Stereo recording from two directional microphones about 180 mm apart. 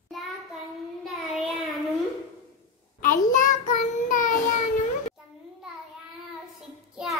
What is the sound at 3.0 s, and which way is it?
Child singing, 45° left (ahead or behind).